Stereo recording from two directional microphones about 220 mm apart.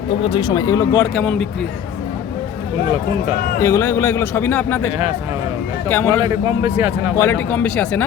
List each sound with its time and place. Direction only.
0.1 s speech: 25° left (ahead or behind)
1.1 s speech: 5° left (ahead or behind)
3.6 s a man's voice: 10° left (ahead or behind)
5.9 s a man's voice: 10° left (ahead or behind)
6.2 s speech: 10° right (ahead or behind)
7.2 s a man's voice: 10° left (ahead or behind)